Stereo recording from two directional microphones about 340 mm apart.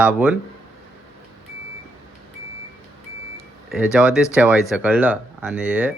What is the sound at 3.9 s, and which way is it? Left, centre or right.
Speech, centre.